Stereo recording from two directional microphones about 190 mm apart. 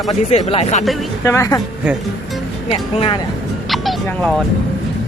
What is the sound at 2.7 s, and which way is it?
Speech, 30° left (ahead or behind).